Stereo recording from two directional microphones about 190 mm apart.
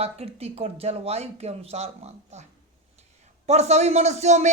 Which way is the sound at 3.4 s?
35° right (ahead or behind).